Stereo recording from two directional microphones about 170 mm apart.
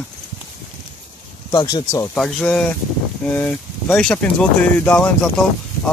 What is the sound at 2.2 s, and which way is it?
Speech, centre (ahead or behind).